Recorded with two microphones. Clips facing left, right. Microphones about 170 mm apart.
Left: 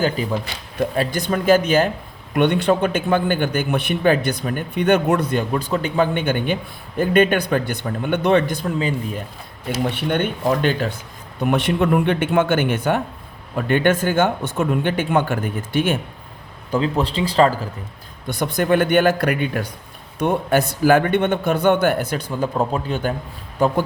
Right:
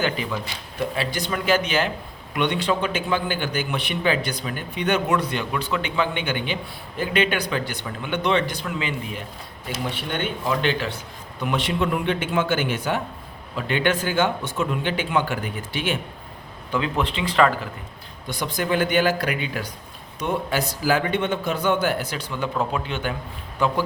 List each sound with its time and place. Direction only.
0.0 s speech: 40° left (ahead or behind)
0.9 s a man's voice: 50° left (ahead or behind)
8.6 s a man's voice: 40° left (ahead or behind)
16.7 s speech: 35° left (ahead or behind)
18.3 s a man's voice: 55° left (ahead or behind)
22.3 s a man's voice: 35° left (ahead or behind)